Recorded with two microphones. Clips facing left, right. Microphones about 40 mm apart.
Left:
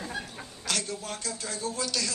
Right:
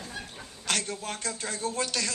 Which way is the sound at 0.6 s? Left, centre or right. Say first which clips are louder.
Right 2 dB; right.